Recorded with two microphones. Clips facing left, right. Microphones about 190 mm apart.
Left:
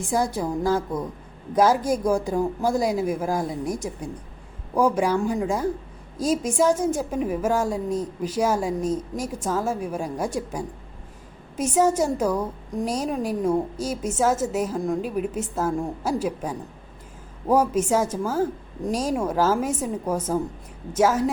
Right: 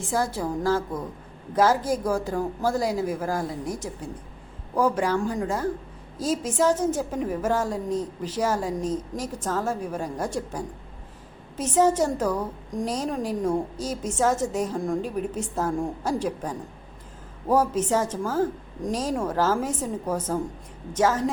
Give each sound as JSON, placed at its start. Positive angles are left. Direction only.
{"t": 0.0, "sound": "a woman's voice", "side_deg": 15}